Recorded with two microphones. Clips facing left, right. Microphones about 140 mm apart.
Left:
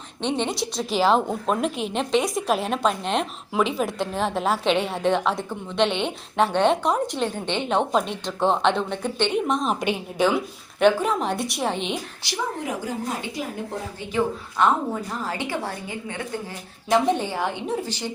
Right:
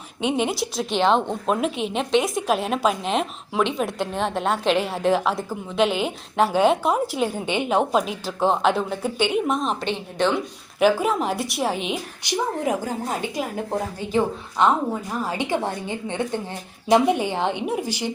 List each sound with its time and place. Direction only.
0.2 s a woman's voice: 5° right (ahead or behind)
9.8 s a woman's voice: 10° left (ahead or behind)
10.8 s a woman's voice: 5° right (ahead or behind)
14.1 s a woman's voice: 30° right (ahead or behind)
15.2 s a woman's voice: 15° right (ahead or behind)